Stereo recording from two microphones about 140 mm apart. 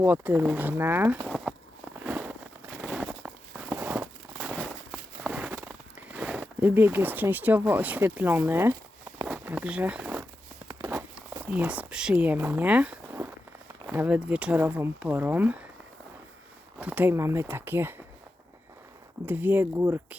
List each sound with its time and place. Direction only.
0.0 s speech: 15° right (ahead or behind)
2.0 s a sound: 15° right (ahead or behind)
2.8 s a sound: 5° right (ahead or behind)
6.1 s speech: 5° right (ahead or behind)
9.2 s zipper: 10° right (ahead or behind)
10.7 s a sound: 15° right (ahead or behind)
13.8 s speech: 10° right (ahead or behind)
16.7 s speech: 10° right (ahead or behind)
19.2 s speech: 15° right (ahead or behind)